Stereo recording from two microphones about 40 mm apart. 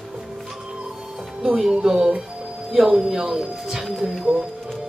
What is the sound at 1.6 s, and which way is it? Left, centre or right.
A woman's voice, centre.